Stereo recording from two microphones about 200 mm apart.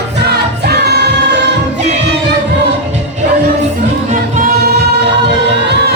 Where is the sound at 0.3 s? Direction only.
55° right (ahead or behind).